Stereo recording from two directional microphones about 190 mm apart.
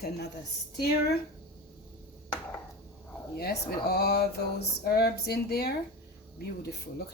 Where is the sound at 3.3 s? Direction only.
55° left (ahead or behind).